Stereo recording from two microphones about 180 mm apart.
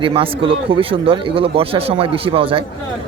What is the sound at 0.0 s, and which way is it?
A man's voice, 30° right (ahead or behind).